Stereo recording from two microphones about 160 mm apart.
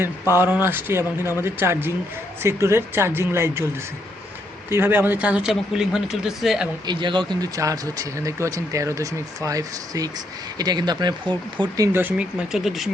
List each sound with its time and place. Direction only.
0.4 s speech: 15° right (ahead or behind)
4.7 s speech: 15° right (ahead or behind)
6.8 s speech: 30° right (ahead or behind)
11.9 s speech: 10° right (ahead or behind)